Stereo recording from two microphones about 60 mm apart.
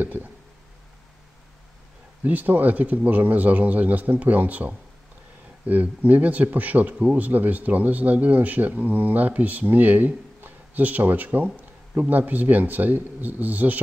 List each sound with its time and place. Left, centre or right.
0.0 s speech: right
2.2 s speech: right